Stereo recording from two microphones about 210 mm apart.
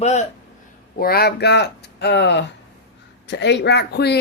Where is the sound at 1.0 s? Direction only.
50° left (ahead or behind).